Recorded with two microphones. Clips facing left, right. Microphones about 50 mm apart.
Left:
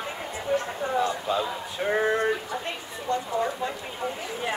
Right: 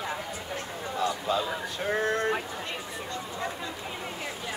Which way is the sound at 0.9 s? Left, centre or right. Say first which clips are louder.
Left 3 dB; left.